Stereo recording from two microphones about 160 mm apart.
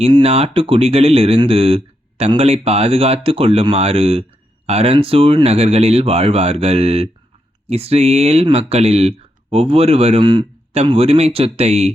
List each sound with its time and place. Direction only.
0.1 s speech: 35° right (ahead or behind)